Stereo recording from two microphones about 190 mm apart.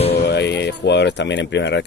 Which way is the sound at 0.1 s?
60° left (ahead or behind).